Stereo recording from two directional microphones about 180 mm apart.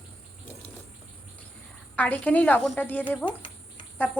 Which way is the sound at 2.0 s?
10° left (ahead or behind).